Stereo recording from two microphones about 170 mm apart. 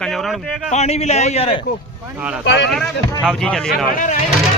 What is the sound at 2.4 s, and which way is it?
Speech, 90° left.